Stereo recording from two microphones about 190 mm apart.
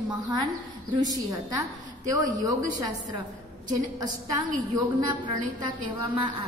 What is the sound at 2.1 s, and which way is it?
Speech, 20° right (ahead or behind).